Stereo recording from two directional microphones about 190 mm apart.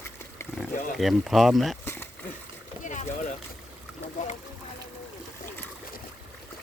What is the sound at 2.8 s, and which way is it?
Boat, 40° left (ahead or behind).